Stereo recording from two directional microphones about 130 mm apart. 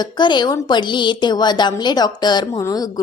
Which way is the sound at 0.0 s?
35° left (ahead or behind).